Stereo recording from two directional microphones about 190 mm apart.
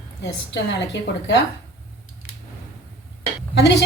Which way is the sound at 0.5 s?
65° left (ahead or behind).